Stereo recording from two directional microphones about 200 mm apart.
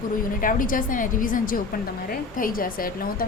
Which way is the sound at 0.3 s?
45° left (ahead or behind).